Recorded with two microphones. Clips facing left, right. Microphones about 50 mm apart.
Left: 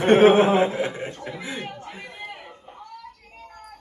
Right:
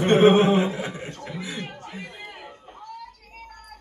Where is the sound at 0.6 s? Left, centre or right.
Left; by 2.1 s centre.